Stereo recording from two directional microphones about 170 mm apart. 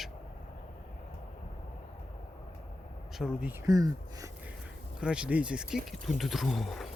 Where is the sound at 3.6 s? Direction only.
20° right (ahead or behind).